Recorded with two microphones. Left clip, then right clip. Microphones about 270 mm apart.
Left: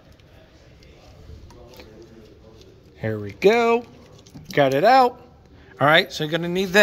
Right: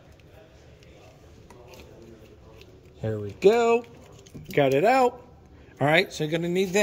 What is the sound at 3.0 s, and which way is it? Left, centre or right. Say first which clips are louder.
Speech: left 2 dB; left.